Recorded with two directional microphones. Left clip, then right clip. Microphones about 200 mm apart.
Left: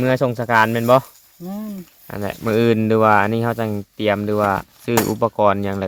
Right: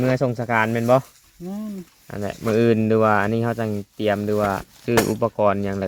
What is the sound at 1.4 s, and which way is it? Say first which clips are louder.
Speech: left 2 dB; 45° left (ahead or behind).